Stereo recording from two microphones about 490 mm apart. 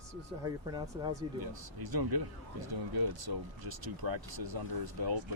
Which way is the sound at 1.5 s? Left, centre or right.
Right.